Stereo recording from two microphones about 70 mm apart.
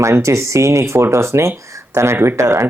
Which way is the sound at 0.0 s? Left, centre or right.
Right.